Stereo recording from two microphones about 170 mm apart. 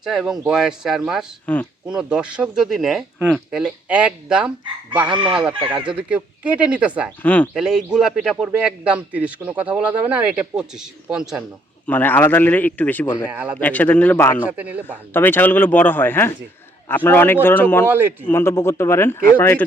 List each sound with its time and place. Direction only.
0.0 s speech: centre (ahead or behind)
1.9 s speech: 5° right (ahead or behind)
5.0 s speech: 30° right (ahead or behind)
6.1 s speech: 10° right (ahead or behind)
7.2 s speech: 10° left (ahead or behind)
7.5 s speech: 5° right (ahead or behind)
11.9 s speech: 10° left (ahead or behind)
13.3 s speech: 10° right (ahead or behind)
13.6 s speech: 10° left (ahead or behind)
14.5 s speech: 10° right (ahead or behind)
15.1 s speech: 10° left (ahead or behind)